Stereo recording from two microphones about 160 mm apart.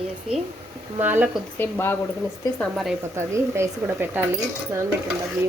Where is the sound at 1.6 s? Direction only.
15° left (ahead or behind).